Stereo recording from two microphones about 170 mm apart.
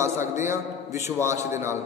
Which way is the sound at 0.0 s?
15° right (ahead or behind).